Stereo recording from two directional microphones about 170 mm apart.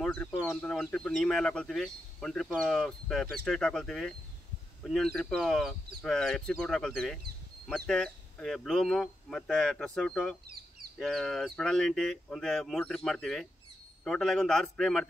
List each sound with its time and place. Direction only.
0.0 s bird: 5° left (ahead or behind)
0.4 s speech: 5° left (ahead or behind)